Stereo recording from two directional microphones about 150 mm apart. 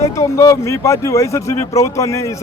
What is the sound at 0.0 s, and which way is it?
Speech, 20° left (ahead or behind).